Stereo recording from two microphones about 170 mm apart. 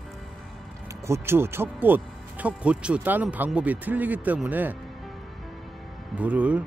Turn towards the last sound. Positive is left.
turn(degrees=-10)  # may be behind; listen again after turning